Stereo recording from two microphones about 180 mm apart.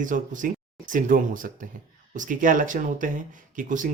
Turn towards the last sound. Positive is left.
turn(degrees=-45)  # may be behind; listen again after turning